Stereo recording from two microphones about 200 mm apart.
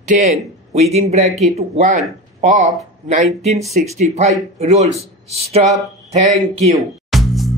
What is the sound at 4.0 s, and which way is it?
Speech, 35° right (ahead or behind).